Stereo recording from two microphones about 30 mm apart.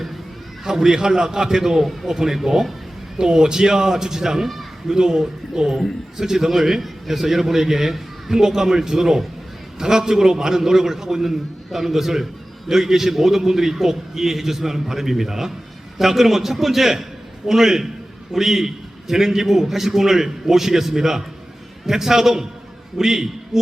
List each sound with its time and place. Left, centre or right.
0.6 s a man's voice: centre